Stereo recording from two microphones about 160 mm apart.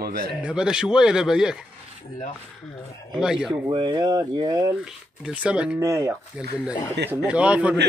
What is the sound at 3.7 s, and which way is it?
Speech, 30° right (ahead or behind).